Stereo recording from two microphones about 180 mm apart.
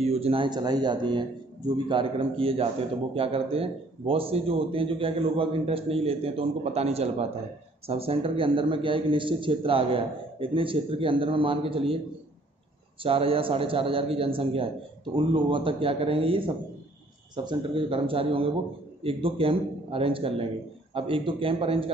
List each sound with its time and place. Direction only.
0.0 s a man's voice: 35° right (ahead or behind)
13.0 s a man's voice: 30° right (ahead or behind)
17.5 s a man's voice: 30° right (ahead or behind)